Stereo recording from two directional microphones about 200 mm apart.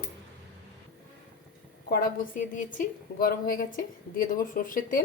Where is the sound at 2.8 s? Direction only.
45° left (ahead or behind).